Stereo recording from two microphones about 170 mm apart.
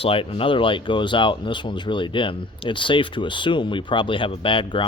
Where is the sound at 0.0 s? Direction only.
35° left (ahead or behind).